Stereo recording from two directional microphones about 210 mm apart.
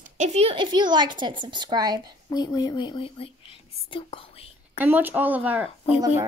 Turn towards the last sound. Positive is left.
turn(degrees=-10)  # may be behind; listen again after turning